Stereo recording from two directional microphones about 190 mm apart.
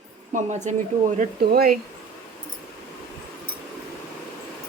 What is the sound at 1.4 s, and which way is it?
Speech, 55° right (ahead or behind).